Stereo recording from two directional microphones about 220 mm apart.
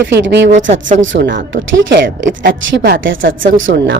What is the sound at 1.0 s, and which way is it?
Speech, 55° right (ahead or behind).